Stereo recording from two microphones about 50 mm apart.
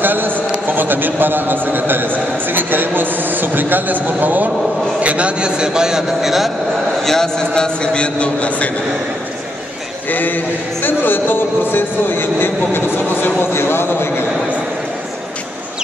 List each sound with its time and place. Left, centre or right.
0.0 s a sound: right
0.7 s a man's voice: right
5.0 s a man's voice: right; by 6.5 s centre
7.0 s a man's voice: centre; by 8.7 s left
10.0 s a man's voice: left